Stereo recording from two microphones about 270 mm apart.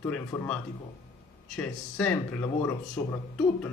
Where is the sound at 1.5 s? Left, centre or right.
Centre.